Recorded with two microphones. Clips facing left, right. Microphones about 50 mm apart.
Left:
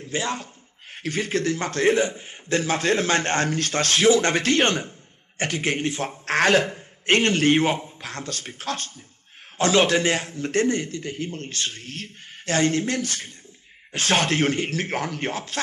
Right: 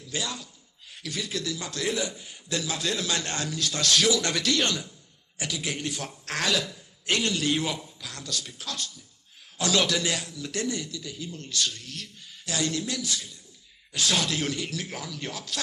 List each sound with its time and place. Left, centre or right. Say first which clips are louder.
0.0 s a man's voice: left 6 dB; left